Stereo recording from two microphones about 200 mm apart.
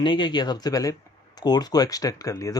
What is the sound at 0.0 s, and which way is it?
Speech, 20° left (ahead or behind).